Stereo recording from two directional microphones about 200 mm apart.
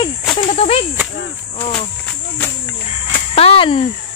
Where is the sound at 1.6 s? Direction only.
10° left (ahead or behind).